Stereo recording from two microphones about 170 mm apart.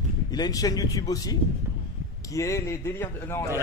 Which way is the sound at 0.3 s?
20° left (ahead or behind).